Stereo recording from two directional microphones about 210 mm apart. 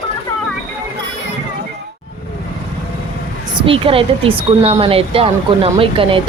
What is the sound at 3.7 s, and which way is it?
Speech, 25° right (ahead or behind).